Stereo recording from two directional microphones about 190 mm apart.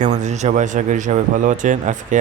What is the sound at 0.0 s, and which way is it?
Speech, 40° right (ahead or behind).